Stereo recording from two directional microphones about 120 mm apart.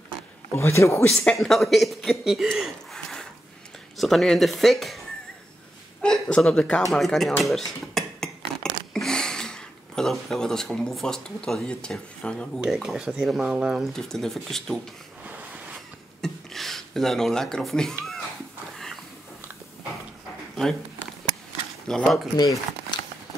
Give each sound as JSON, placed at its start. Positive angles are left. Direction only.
{"t": 0.5, "sound": "speech", "side_deg": 25}
{"t": 1.1, "sound": "speech", "side_deg": 5}
{"t": 6.0, "sound": "speech", "side_deg": 5}
{"t": 7.4, "sound": "a sound", "side_deg": 0}
{"t": 8.9, "sound": "speech", "side_deg": 5}
{"t": 12.5, "sound": "speech", "side_deg": -5}
{"t": 16.2, "sound": "a sound", "side_deg": 0}
{"t": 21.8, "sound": "speech", "side_deg": 5}
{"t": 22.4, "sound": "speech", "side_deg": 35}